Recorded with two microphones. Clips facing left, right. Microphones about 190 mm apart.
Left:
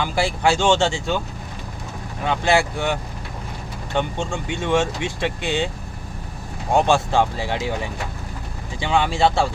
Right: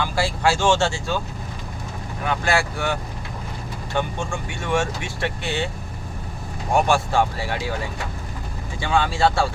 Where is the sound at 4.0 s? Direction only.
20° left (ahead or behind).